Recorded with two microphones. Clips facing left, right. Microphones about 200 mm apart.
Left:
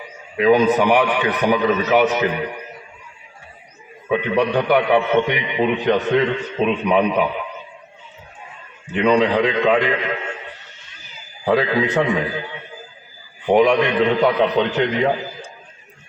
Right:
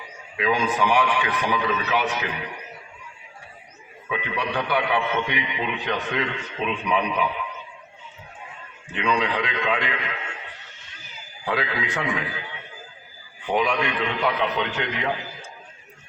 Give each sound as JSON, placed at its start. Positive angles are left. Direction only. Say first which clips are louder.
{"t": 0.3, "sound": "a man's voice", "louder": "left 9 dB", "side_deg": 40}
{"t": 4.1, "sound": "a man's voice", "louder": "left 10 dB", "side_deg": 40}
{"t": 9.0, "sound": "a man's voice", "louder": "left 9 dB", "side_deg": 35}
{"t": 11.4, "sound": "a man's voice", "louder": "left 9 dB", "side_deg": 40}
{"t": 13.5, "sound": "a man's voice", "louder": "left 9 dB", "side_deg": 40}